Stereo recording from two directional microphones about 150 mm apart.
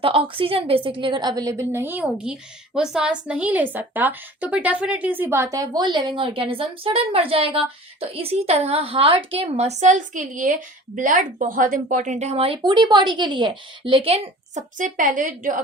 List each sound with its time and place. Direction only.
0.0 s a woman's voice: 35° right (ahead or behind)
14.5 s a woman's voice: 55° right (ahead or behind)